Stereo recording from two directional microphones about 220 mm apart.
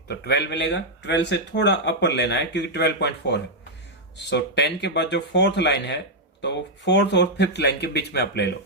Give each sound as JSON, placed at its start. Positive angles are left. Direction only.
{"t": 0.3, "sound": "speech", "side_deg": 50}